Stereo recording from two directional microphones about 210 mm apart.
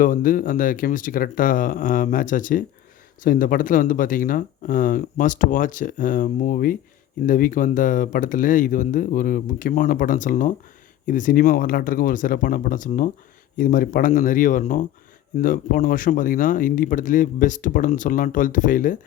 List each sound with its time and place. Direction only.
0.0 s speech: 40° left (ahead or behind)